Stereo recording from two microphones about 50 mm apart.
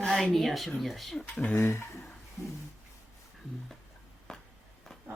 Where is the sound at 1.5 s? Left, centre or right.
Left.